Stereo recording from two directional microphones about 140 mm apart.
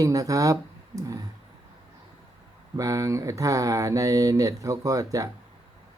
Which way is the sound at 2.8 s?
25° right (ahead or behind).